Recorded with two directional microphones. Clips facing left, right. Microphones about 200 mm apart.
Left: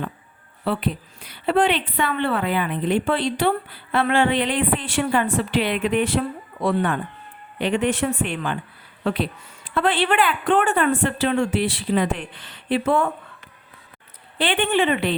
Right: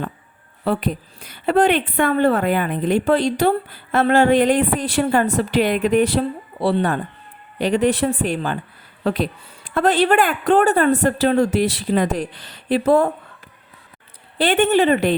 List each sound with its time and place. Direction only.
0.6 s a woman's voice: 45° right (ahead or behind)
14.3 s a woman's voice: 40° right (ahead or behind)